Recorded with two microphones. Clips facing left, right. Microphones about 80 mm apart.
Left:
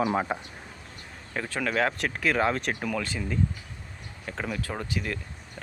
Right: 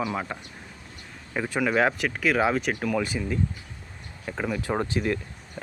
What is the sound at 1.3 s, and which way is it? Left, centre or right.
Speech, centre.